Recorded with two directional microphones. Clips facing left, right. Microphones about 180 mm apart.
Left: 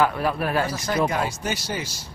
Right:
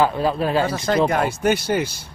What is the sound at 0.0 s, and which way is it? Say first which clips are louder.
Speech: right 3 dB; 25° right (ahead or behind).